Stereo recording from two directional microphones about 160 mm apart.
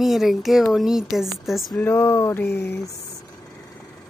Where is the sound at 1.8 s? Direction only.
15° left (ahead or behind).